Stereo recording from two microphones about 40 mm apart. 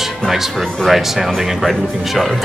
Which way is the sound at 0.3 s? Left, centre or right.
Centre.